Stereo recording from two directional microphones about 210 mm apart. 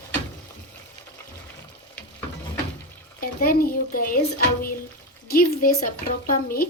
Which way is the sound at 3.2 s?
45° left (ahead or behind).